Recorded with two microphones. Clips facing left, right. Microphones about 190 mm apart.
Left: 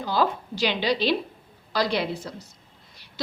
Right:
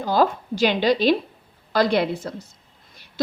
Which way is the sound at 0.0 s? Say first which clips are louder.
Right 4 dB; 45° right (ahead or behind).